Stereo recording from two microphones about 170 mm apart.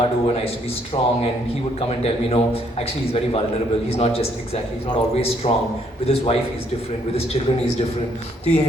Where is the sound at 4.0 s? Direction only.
35° left (ahead or behind).